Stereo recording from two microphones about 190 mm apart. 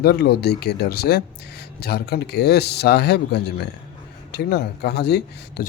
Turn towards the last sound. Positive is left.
turn(degrees=60)  # may be behind; listen again after turning